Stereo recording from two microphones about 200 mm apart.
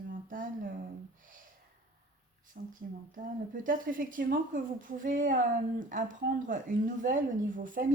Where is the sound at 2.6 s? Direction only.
45° right (ahead or behind).